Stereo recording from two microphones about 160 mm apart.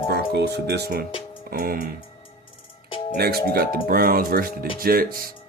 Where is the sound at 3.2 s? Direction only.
75° right (ahead or behind).